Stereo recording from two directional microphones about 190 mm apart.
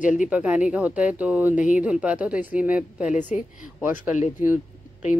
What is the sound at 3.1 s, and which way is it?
Speech, 40° left (ahead or behind).